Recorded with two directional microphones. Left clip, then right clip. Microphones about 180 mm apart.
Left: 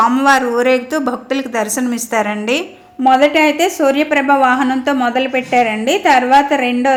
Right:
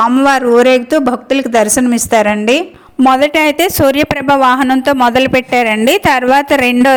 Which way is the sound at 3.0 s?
60° right (ahead or behind).